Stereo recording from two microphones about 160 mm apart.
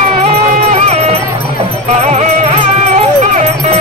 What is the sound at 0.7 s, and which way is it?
Music, 40° right (ahead or behind).